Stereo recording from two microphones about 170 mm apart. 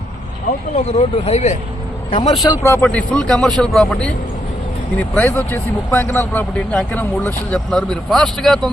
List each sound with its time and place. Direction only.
0.8 s speech: 40° left (ahead or behind)
2.6 s a man's voice: 10° left (ahead or behind)